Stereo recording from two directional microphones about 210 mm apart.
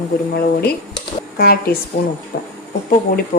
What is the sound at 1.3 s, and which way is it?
Speech, 45° left (ahead or behind).